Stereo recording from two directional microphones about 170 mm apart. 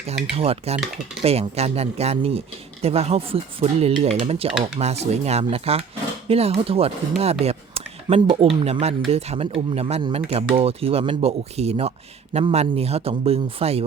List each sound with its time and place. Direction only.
0.3 s speech: 35° right (ahead or behind)